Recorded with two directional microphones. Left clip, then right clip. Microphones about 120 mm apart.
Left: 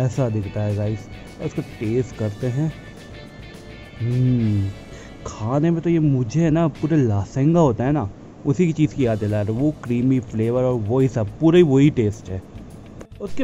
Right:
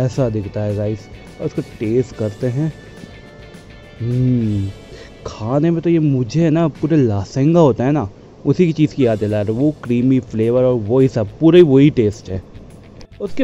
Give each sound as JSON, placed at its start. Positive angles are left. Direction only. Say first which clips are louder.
{"t": 0.0, "sound": "a man's voice", "louder": "right 5 dB", "side_deg": -25}
{"t": 5.2, "sound": "a man's voice", "louder": "right 4 dB", "side_deg": -25}